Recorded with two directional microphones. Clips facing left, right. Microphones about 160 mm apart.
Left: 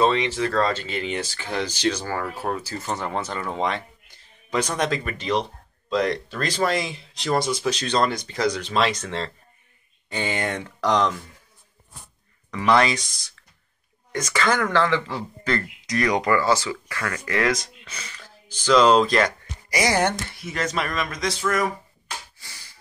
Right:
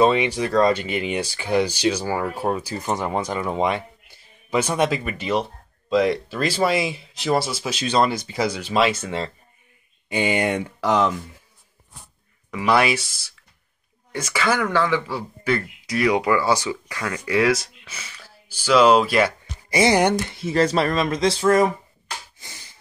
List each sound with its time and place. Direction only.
0.0 s speech: 10° right (ahead or behind)
12.4 s speech: 10° right (ahead or behind)
19.7 s speech: 25° right (ahead or behind)
20.0 s speech: 15° right (ahead or behind)
20.3 s speech: 30° right (ahead or behind)
22.4 s a sound: 20° right (ahead or behind)